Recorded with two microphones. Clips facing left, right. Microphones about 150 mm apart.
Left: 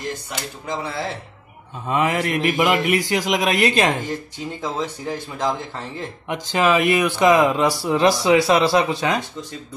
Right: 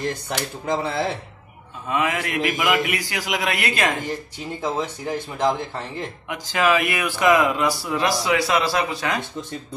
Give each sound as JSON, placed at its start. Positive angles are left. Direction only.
{"t": 0.7, "sound": "speech", "side_deg": -25}
{"t": 1.9, "sound": "speech", "side_deg": 35}
{"t": 4.6, "sound": "speech", "side_deg": -15}
{"t": 6.2, "sound": "speech", "side_deg": 25}